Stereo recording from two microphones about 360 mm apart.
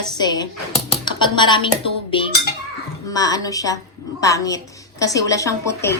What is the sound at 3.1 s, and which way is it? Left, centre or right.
Speech, centre.